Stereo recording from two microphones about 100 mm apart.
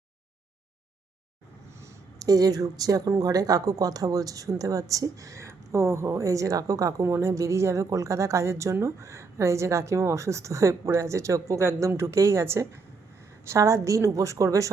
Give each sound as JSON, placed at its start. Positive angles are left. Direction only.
{"t": 2.1, "sound": "speech", "side_deg": -40}